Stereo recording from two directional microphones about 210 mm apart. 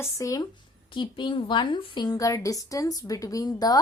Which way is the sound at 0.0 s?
15° left (ahead or behind).